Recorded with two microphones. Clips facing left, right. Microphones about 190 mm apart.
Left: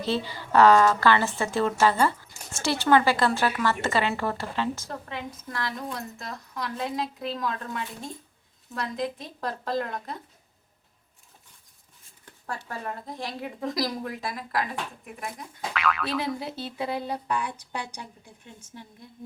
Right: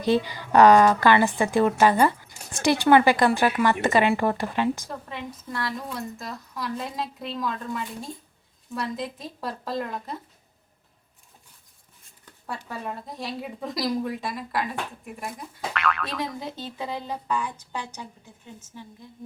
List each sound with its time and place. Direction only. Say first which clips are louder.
0.0 s a woman's voice: right 5 dB; 15° right (ahead or behind)
4.9 s a woman's voice: even; centre (ahead or behind)
12.5 s a woman's voice: right 2 dB; 5° right (ahead or behind); by 18.1 s 15° left (ahead or behind)